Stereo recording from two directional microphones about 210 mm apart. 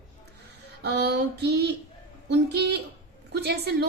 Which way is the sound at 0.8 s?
50° right (ahead or behind).